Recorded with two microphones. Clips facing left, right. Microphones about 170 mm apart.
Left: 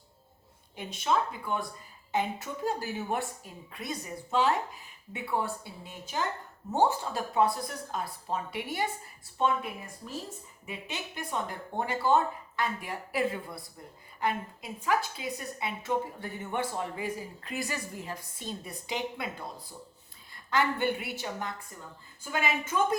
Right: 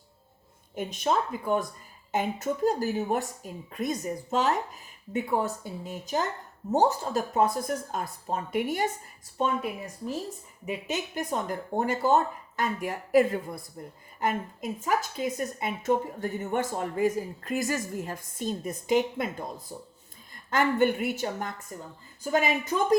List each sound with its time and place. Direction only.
0.8 s a woman's voice: 45° right (ahead or behind)
10.7 s a woman's voice: 45° right (ahead or behind)